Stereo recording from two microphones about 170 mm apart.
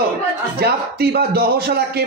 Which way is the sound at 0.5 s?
70° right (ahead or behind).